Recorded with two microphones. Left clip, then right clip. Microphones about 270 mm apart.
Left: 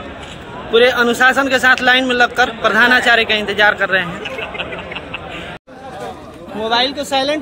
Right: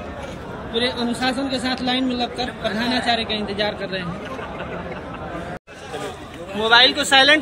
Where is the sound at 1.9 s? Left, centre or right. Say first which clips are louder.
Left 10 dB; centre.